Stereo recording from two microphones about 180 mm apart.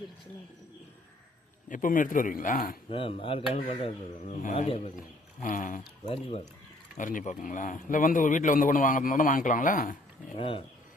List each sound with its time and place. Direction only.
1.7 s speech: 50° left (ahead or behind)
2.9 s speech: 30° left (ahead or behind)
5.4 s speech: 45° left (ahead or behind)
10.3 s speech: 30° left (ahead or behind)